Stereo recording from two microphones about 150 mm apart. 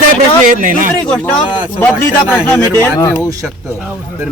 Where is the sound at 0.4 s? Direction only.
65° right (ahead or behind).